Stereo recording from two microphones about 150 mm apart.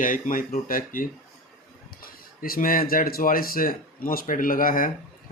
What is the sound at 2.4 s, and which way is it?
Speech, 75° left (ahead or behind).